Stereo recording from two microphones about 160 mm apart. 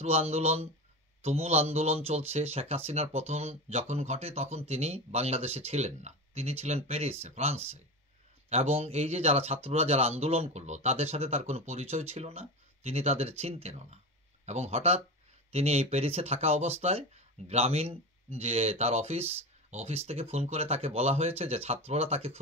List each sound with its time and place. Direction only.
0.0 s speech: 40° right (ahead or behind)